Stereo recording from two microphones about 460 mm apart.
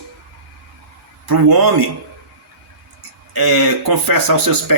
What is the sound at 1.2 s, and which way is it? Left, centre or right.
Speech, right.